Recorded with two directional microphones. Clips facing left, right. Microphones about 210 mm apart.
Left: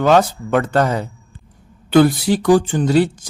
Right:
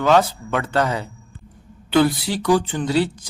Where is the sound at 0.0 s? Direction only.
45° left (ahead or behind).